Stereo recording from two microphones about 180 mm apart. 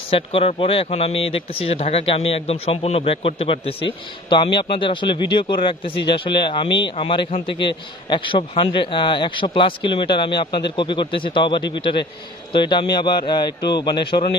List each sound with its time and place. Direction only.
0.1 s speech: 30° left (ahead or behind)